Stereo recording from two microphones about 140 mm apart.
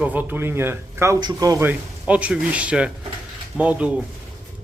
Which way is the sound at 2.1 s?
10° right (ahead or behind).